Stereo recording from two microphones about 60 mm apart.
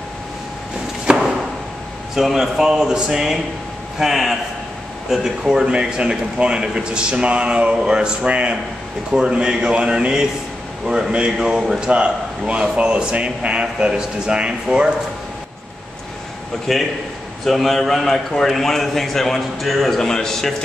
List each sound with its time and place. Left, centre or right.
1.0 s chop: centre
2.1 s a man's voice: centre
16.7 s a man's voice: centre